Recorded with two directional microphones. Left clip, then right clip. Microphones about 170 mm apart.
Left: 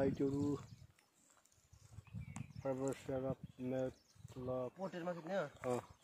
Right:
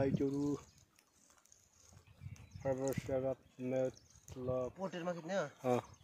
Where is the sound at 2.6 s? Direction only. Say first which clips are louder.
Right 4 dB; 15° left (ahead or behind).